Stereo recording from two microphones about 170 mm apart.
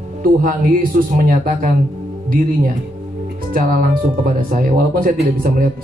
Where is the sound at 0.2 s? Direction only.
55° right (ahead or behind).